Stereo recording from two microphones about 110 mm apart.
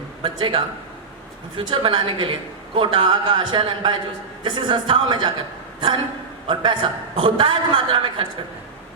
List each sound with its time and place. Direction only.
0.2 s a man's voice: 50° right (ahead or behind)
6.5 s a man's voice: 45° right (ahead or behind)